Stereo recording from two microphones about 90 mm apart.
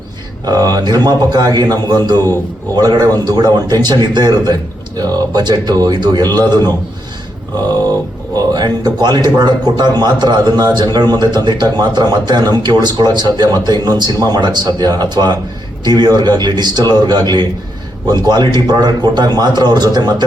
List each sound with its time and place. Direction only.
0.4 s a man's voice: 50° right (ahead or behind)
8.5 s a man's voice: 55° right (ahead or behind)